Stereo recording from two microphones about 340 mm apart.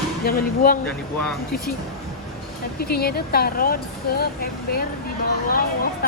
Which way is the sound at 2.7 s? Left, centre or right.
Left.